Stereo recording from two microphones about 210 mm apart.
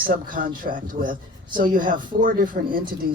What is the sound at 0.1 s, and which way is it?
A man's voice, 40° right (ahead or behind).